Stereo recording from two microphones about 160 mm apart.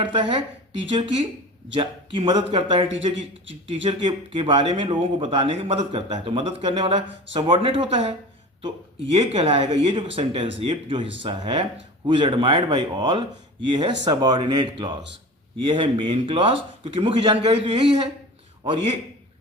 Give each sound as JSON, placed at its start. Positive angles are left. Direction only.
{"t": 0.0, "sound": "speech", "side_deg": -30}
{"t": 9.1, "sound": "speech", "side_deg": -35}